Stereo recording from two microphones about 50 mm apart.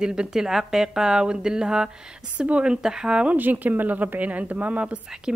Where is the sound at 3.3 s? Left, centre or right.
Right.